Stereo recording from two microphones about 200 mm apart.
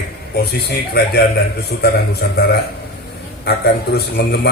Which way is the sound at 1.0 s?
55° left (ahead or behind).